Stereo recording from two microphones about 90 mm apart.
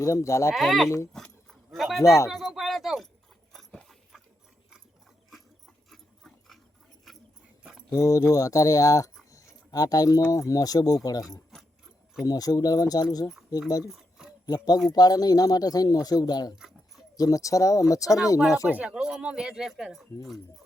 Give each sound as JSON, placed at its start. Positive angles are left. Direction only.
{"t": 0.0, "sound": "speech", "side_deg": 35}
{"t": 0.5, "sound": "speech", "side_deg": 0}
{"t": 1.7, "sound": "a sound", "side_deg": 0}
{"t": 2.3, "sound": "keys jangling", "side_deg": 0}
{"t": 3.5, "sound": "dog", "side_deg": 0}
{"t": 5.9, "sound": "dog", "side_deg": 5}
{"t": 7.6, "sound": "a sound", "side_deg": -10}
{"t": 7.9, "sound": "speech", "side_deg": 40}
{"t": 9.3, "sound": "a sound", "side_deg": 40}
{"t": 10.3, "sound": "speech", "side_deg": 40}
{"t": 13.9, "sound": "a sound", "side_deg": -5}
{"t": 14.4, "sound": "speech", "side_deg": 45}
{"t": 18.7, "sound": "speech", "side_deg": -15}